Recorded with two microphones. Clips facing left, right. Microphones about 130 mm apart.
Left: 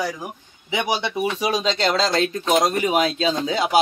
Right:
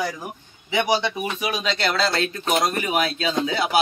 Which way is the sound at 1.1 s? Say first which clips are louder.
Left 4 dB; 30° left (ahead or behind).